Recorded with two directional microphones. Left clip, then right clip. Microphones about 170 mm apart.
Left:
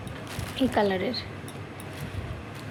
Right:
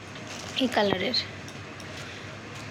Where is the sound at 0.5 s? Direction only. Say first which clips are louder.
Even; 5° left (ahead or behind).